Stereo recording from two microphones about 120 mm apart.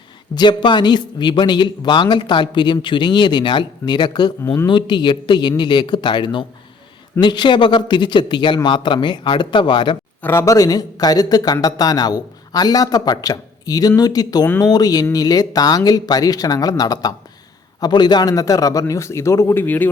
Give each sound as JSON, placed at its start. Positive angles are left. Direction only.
{"t": 0.3, "sound": "a man's voice", "side_deg": 40}
{"t": 10.2, "sound": "a man's voice", "side_deg": 25}